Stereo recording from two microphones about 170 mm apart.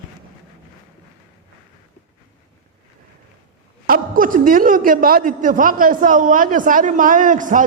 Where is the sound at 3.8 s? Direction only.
55° right (ahead or behind).